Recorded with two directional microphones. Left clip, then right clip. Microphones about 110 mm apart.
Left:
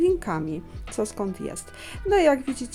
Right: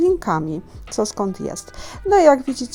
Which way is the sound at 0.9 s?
5° left (ahead or behind).